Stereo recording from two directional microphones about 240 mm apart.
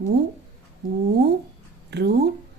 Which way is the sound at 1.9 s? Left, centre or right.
Right.